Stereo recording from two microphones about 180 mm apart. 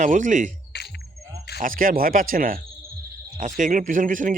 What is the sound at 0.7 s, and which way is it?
Cricket, 65° left (ahead or behind).